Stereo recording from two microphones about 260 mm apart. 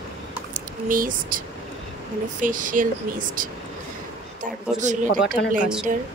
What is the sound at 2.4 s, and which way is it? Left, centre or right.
Speech, right.